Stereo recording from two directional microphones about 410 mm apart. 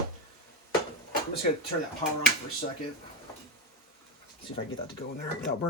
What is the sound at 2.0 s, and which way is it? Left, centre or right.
Speech, centre.